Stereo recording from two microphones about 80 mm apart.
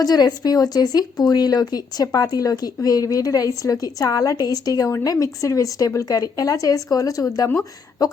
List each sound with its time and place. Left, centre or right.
0.0 s speech: left